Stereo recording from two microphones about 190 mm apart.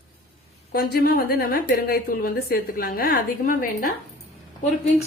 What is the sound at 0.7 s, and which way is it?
A woman's voice, 55° left (ahead or behind).